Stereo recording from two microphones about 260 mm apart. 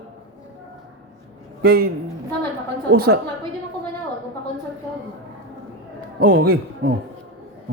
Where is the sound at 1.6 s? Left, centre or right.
Right.